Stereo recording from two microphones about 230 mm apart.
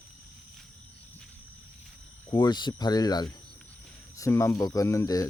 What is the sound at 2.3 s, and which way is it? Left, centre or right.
Speech, centre.